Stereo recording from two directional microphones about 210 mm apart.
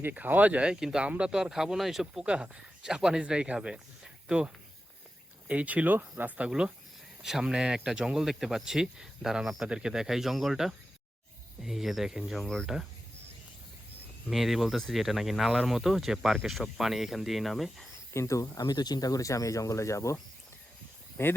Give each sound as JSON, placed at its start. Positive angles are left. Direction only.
{"t": 0.0, "sound": "speech", "side_deg": -10}
{"t": 14.3, "sound": "speech", "side_deg": 0}
{"t": 18.1, "sound": "speech", "side_deg": 15}